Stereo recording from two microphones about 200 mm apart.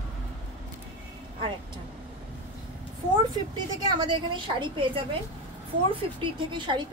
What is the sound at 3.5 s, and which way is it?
A woman's voice, 20° right (ahead or behind).